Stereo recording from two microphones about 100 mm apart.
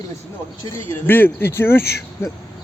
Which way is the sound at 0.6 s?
30° left (ahead or behind).